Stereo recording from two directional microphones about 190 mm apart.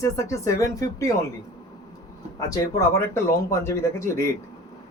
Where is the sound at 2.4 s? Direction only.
15° left (ahead or behind).